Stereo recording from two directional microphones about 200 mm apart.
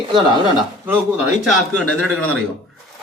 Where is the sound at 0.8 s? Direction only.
10° right (ahead or behind).